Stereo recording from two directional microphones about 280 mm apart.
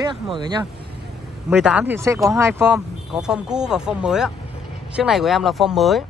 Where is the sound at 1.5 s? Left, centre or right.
Centre.